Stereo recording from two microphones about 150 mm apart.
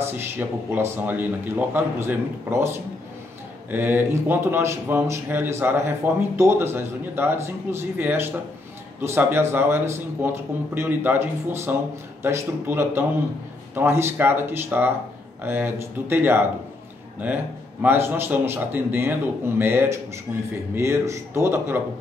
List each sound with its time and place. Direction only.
0.0 s a man's voice: 15° right (ahead or behind)
17.8 s a man's voice: 15° right (ahead or behind)